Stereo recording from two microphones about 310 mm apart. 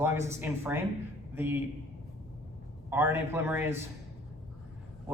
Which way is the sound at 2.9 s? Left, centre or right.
Centre.